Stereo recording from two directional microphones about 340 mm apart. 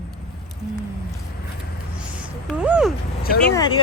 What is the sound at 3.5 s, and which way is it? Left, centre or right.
Speech, centre.